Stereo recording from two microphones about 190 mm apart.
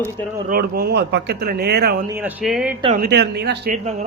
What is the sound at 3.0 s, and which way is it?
Speech, 60° right (ahead or behind).